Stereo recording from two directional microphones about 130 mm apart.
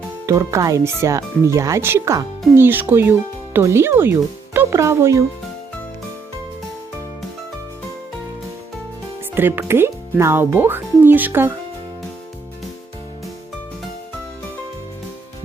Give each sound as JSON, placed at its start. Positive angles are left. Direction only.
{"t": 0.3, "sound": "speech", "side_deg": -20}
{"t": 9.3, "sound": "speech", "side_deg": -15}